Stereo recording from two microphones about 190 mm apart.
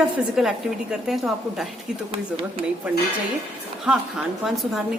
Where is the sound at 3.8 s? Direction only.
Centre (ahead or behind).